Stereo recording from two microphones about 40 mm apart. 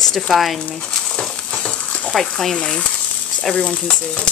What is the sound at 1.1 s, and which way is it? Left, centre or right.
Stir, left.